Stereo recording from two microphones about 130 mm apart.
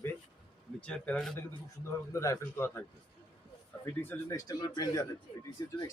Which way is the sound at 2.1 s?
25° left (ahead or behind).